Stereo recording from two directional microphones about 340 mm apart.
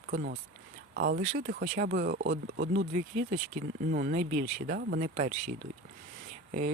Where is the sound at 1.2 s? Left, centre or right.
Centre.